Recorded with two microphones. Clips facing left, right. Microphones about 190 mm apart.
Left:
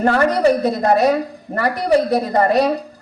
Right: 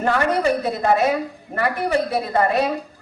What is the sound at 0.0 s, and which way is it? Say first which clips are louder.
A woman's voice: left 5 dB; 35° left (ahead or behind).